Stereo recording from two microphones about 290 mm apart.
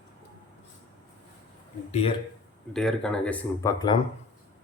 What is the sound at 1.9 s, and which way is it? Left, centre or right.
Speech, left.